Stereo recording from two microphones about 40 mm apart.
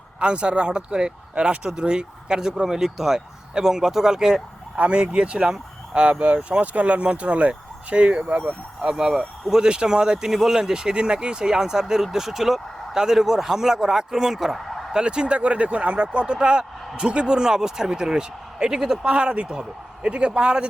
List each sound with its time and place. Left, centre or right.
0.2 s speech: right
4.8 s speech: right
8.8 s speech: centre
14.9 s speech: right